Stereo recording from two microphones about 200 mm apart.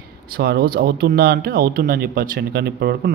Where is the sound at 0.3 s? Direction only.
50° right (ahead or behind).